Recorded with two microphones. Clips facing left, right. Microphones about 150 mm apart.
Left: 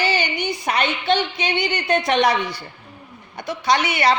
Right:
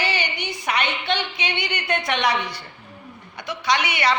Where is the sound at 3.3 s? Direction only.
35° left (ahead or behind).